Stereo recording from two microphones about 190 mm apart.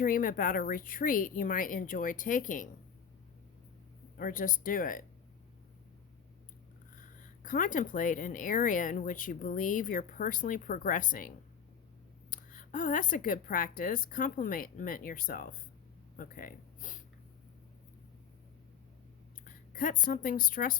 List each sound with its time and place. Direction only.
0.0 s speech: 45° left (ahead or behind)
4.2 s speech: 45° left (ahead or behind)
7.2 s speech: 45° left (ahead or behind)
16.1 s a sound: 45° left (ahead or behind)
19.5 s a woman's voice: 45° left (ahead or behind)